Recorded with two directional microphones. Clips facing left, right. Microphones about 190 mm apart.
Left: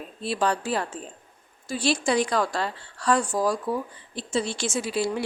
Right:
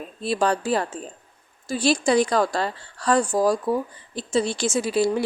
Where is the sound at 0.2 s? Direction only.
40° right (ahead or behind).